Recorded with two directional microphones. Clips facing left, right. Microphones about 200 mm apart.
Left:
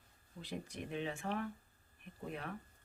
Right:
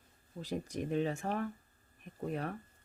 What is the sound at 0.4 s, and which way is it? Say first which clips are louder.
Speech: right 7 dB; 40° right (ahead or behind).